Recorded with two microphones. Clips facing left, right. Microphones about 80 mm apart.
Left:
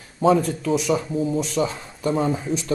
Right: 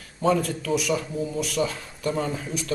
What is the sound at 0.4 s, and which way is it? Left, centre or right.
Speech, left.